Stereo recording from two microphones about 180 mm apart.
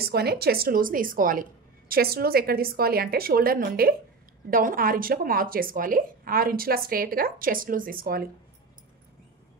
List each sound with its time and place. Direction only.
0.0 s speech: 60° right (ahead or behind)